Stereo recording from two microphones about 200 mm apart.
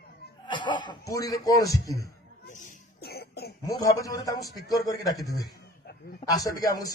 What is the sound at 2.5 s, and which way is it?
Cough, 45° left (ahead or behind).